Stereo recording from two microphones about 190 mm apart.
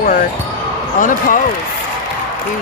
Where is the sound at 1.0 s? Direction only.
45° left (ahead or behind).